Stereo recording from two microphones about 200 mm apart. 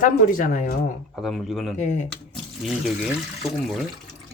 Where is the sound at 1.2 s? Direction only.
Centre (ahead or behind).